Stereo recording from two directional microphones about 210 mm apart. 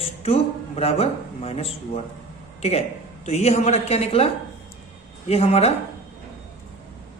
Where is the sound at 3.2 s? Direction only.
30° left (ahead or behind).